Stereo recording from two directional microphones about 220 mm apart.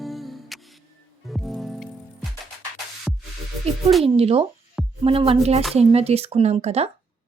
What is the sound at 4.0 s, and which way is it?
Speech, 25° right (ahead or behind).